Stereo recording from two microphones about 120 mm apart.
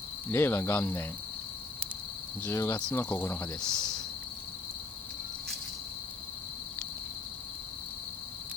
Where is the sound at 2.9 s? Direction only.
15° left (ahead or behind).